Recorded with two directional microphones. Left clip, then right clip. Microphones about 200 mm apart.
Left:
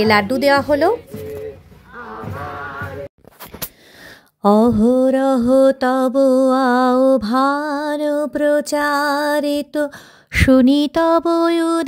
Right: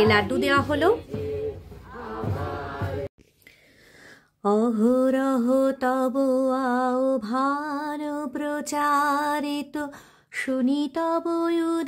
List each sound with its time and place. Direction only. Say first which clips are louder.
0.0 s a woman's voice: left 6 dB; 35° left (ahead or behind)
4.4 s mantra: left 9 dB; 35° left (ahead or behind)
4.8 s mantra: left 7 dB; 20° left (ahead or behind)
10.4 s mantra: left 12 dB; 40° left (ahead or behind)